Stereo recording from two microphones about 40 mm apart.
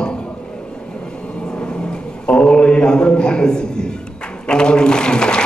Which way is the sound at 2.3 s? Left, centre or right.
Left.